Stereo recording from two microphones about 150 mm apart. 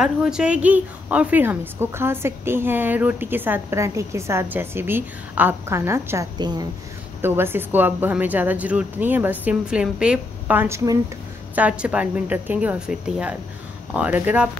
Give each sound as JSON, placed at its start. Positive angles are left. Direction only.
{"t": 0.0, "sound": "a woman's voice", "side_deg": -5}
{"t": 6.3, "sound": "a woman's voice", "side_deg": -30}
{"t": 7.2, "sound": "a woman's voice", "side_deg": -15}